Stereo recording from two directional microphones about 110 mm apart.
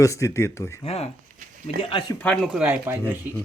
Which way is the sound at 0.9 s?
65° left (ahead or behind).